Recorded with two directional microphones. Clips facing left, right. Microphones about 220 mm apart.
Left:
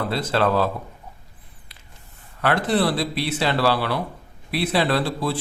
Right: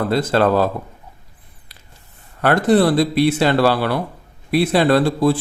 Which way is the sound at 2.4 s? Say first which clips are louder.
Right 6 dB; 45° right (ahead or behind).